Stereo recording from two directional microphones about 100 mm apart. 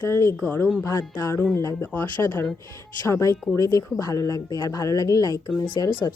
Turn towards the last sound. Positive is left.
turn(degrees=35)  # may be behind; listen again after turning